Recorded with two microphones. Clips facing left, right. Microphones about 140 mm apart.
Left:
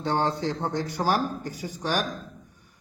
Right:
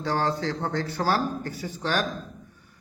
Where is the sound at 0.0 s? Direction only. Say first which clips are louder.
Even; 20° left (ahead or behind).